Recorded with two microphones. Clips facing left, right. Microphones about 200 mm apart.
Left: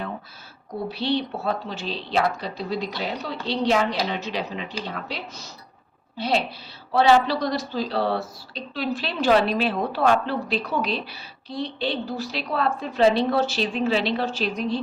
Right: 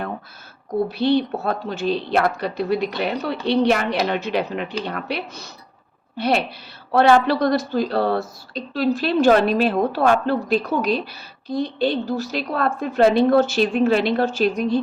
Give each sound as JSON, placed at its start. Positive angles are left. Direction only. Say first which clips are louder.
{"t": 0.9, "sound": "a woman's voice", "louder": "right 4 dB", "side_deg": -50}